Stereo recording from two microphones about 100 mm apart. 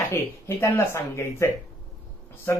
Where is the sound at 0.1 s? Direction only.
25° left (ahead or behind).